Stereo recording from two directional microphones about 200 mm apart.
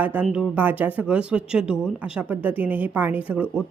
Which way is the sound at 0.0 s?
10° right (ahead or behind).